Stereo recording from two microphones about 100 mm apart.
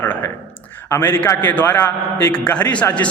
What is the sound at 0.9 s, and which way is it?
A man's voice, 20° left (ahead or behind).